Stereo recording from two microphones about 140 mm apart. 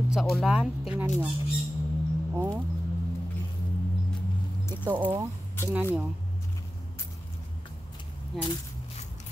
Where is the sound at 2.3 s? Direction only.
15° right (ahead or behind).